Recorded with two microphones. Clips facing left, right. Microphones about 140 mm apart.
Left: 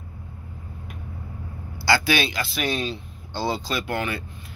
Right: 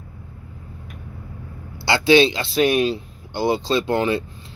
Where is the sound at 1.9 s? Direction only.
25° right (ahead or behind).